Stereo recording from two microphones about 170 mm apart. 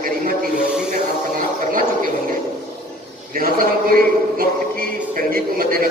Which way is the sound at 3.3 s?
60° right (ahead or behind).